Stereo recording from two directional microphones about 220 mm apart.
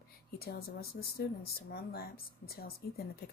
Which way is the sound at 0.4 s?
45° left (ahead or behind).